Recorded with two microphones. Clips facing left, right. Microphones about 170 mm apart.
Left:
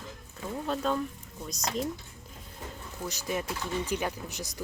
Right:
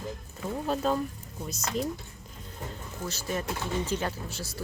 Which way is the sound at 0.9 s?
5° right (ahead or behind).